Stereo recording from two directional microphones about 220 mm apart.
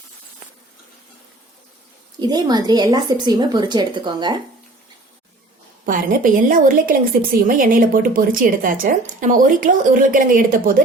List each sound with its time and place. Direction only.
2.1 s a woman's voice: 20° right (ahead or behind)
5.8 s a woman's voice: 40° right (ahead or behind)